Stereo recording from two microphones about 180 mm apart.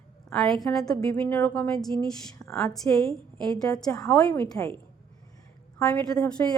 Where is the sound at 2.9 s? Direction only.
15° left (ahead or behind).